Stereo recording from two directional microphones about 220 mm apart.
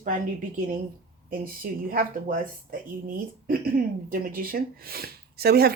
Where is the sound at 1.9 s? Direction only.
40° right (ahead or behind).